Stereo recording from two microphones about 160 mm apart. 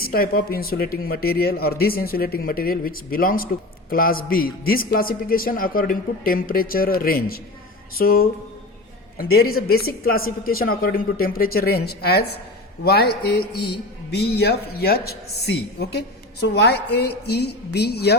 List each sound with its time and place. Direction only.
0.0 s a woman's voice: 70° left (ahead or behind); by 18.2 s 90° left